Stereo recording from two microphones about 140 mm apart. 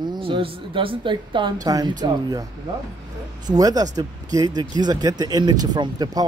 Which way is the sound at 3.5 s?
25° right (ahead or behind).